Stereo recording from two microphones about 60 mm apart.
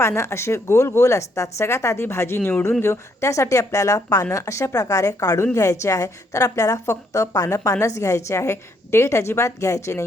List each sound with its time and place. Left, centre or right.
0.2 s speech: left
2.4 s speech: left
2.8 s a woman's voice: left